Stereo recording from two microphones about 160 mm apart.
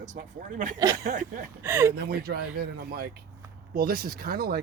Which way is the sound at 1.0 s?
60° right (ahead or behind).